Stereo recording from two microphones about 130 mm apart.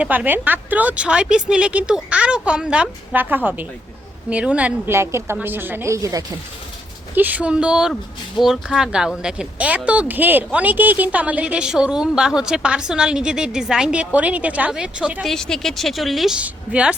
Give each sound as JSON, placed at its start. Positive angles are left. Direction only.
{"t": 0.0, "sound": "speech", "side_deg": -10}
{"t": 4.9, "sound": "a woman's voice", "side_deg": -20}
{"t": 7.2, "sound": "speech", "side_deg": -10}
{"t": 15.3, "sound": "a woman's voice", "side_deg": 5}